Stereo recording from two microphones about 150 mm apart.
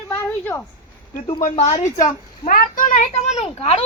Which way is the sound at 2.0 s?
65° left (ahead or behind).